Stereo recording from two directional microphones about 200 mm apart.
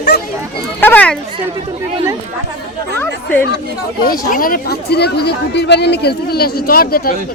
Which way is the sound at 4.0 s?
45° left (ahead or behind).